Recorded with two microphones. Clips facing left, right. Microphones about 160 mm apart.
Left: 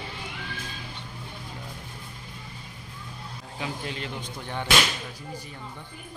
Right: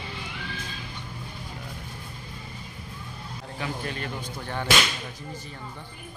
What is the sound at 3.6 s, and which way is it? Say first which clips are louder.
Speech: right 1 dB; 15° left (ahead or behind).